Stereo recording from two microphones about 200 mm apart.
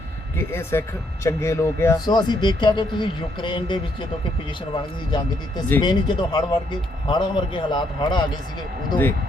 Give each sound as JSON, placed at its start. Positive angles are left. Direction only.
{"t": 0.3, "sound": "speech", "side_deg": 10}
{"t": 5.8, "sound": "speech", "side_deg": 20}
{"t": 8.9, "sound": "speech", "side_deg": 10}